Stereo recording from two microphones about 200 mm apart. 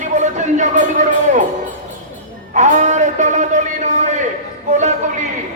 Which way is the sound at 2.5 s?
40° right (ahead or behind).